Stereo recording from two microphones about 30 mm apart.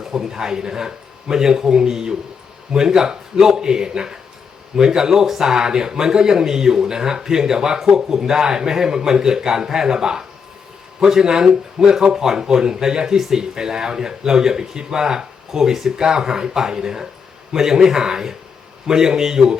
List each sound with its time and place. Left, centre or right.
0.0 s speech: centre